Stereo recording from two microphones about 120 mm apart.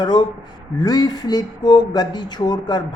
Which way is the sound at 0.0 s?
35° left (ahead or behind).